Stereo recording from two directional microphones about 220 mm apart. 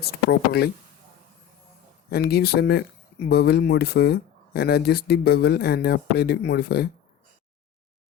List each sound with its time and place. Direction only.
0.0 s speech: 45° left (ahead or behind)
2.0 s speech: 45° left (ahead or behind)